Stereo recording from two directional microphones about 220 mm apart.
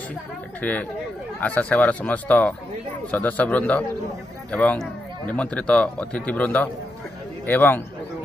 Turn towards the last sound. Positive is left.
turn(degrees=10)  # may be behind; listen again after turning